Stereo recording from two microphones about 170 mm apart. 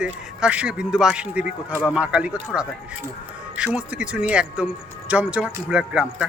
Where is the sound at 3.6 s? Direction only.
5° right (ahead or behind).